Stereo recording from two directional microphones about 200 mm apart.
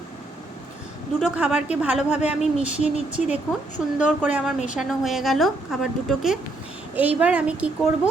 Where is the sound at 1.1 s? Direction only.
5° right (ahead or behind).